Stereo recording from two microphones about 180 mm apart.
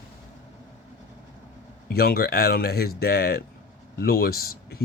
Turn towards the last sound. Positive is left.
turn(degrees=55)  # may be behind; listen again after turning